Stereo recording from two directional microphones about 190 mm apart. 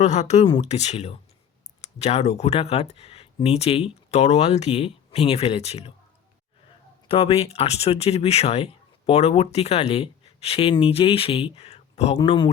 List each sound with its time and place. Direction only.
0.0 s speech: 35° left (ahead or behind)
7.1 s speech: 30° left (ahead or behind)